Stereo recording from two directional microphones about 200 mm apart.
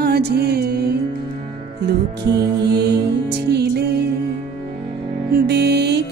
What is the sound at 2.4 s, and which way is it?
Music, 55° right (ahead or behind).